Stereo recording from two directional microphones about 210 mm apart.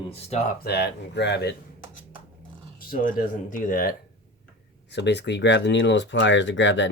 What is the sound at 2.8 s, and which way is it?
Speech, 40° left (ahead or behind).